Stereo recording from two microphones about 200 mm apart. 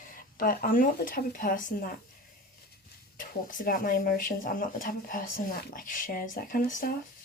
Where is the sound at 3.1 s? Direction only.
40° left (ahead or behind).